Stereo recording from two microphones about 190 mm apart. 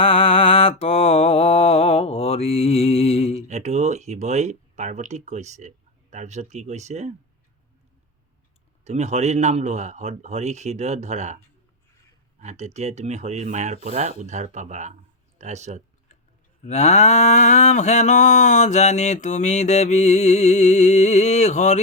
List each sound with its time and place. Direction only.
0.0 s mantra: 30° left (ahead or behind)
3.5 s speech: 35° right (ahead or behind)
8.8 s speech: 35° right (ahead or behind)
12.4 s speech: 35° right (ahead or behind)
16.6 s mantra: 35° left (ahead or behind)